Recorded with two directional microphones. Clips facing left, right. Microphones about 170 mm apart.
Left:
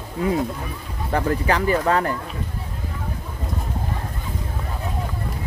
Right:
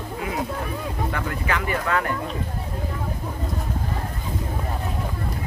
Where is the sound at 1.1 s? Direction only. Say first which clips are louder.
Left 10 dB; 35° left (ahead or behind).